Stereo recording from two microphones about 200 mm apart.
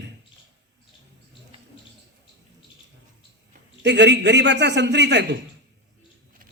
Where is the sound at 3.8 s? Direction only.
60° right (ahead or behind).